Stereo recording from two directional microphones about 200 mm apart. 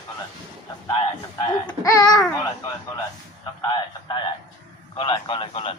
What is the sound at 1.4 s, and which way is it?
Baby cry, 20° left (ahead or behind).